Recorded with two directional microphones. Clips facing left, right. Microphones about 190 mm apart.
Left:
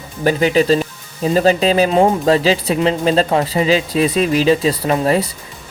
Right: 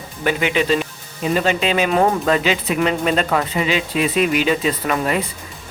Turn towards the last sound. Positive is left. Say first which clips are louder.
# left 5 dB
turn(degrees=30)  # may be behind; listen again after turning